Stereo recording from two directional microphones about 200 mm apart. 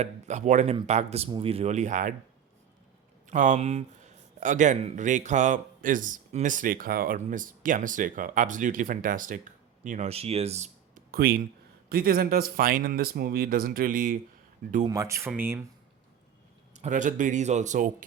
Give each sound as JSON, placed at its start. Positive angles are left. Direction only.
{"t": 0.0, "sound": "speech", "side_deg": -35}
{"t": 3.2, "sound": "speech", "side_deg": -40}
{"t": 14.8, "sound": "speech", "side_deg": -15}
{"t": 16.7, "sound": "speech", "side_deg": -35}